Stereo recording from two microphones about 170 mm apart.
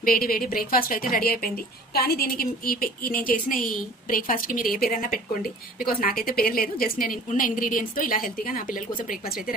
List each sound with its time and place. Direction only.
0.0 s a woman's voice: 60° left (ahead or behind)